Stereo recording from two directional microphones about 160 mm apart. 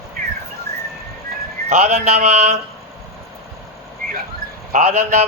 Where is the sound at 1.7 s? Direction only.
45° right (ahead or behind).